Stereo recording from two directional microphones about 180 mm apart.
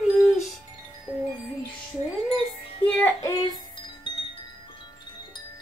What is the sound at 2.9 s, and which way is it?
Music, 15° left (ahead or behind).